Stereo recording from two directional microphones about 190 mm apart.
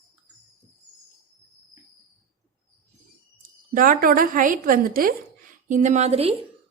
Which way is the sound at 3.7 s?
45° right (ahead or behind).